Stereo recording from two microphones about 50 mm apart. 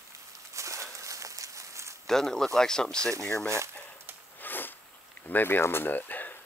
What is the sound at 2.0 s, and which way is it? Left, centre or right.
Speech, centre.